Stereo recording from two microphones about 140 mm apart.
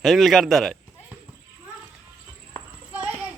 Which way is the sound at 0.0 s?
Centre (ahead or behind).